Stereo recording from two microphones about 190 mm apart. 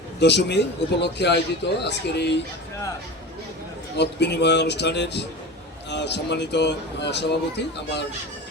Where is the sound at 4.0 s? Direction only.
60° left (ahead or behind).